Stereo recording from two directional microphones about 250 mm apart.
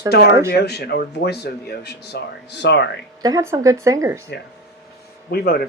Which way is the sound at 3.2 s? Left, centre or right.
Centre.